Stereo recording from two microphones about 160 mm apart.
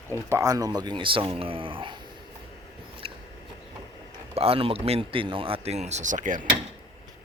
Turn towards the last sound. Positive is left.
turn(degrees=-55)  # may be behind; listen again after turning